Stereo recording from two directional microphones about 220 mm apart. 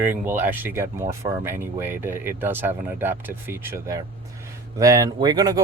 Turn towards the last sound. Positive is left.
turn(degrees=-15)  # may be behind; listen again after turning